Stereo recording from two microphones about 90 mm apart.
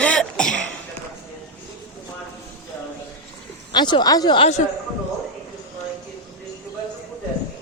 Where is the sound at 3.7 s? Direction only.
55° left (ahead or behind).